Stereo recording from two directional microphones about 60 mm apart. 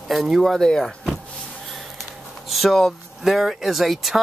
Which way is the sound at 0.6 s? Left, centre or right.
Centre.